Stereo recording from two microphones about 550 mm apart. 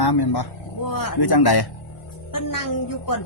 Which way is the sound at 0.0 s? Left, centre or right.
Left.